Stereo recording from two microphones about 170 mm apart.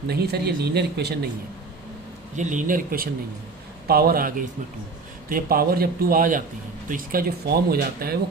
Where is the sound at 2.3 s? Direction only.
45° right (ahead or behind).